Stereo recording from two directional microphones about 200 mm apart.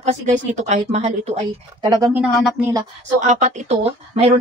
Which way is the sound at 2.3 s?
Centre (ahead or behind).